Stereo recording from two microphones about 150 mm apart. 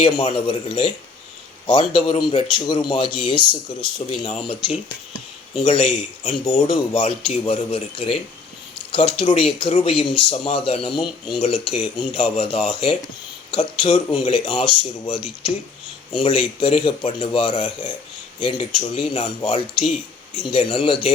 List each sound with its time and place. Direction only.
0.0 s speech: 35° left (ahead or behind)
16.6 s speech: 35° left (ahead or behind)